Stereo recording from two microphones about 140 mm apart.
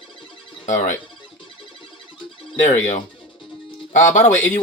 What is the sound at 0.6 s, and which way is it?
Speech, 60° left (ahead or behind).